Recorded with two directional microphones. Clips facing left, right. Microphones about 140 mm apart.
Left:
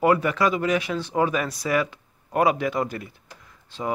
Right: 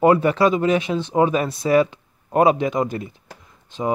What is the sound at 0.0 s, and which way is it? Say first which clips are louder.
Speech: right 5 dB; 30° right (ahead or behind).